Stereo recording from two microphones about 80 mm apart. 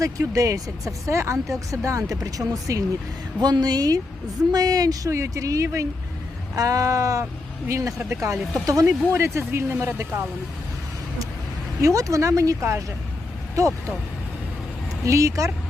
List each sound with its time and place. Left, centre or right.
0.0 s speech: right
3.4 s speech: right
5.1 s speech: right
11.8 s speech: right
15.0 s speech: right